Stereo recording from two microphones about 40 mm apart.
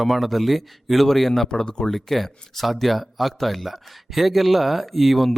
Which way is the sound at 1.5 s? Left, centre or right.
Left.